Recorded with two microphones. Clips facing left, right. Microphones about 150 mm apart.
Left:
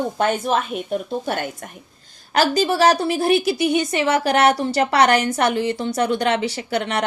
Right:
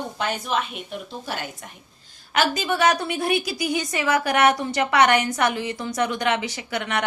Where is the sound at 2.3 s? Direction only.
35° left (ahead or behind).